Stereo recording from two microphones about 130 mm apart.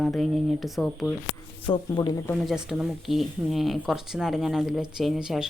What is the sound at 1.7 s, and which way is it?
Speech, 30° left (ahead or behind).